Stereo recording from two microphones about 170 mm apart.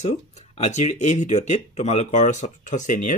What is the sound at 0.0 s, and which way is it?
Speech, 40° left (ahead or behind).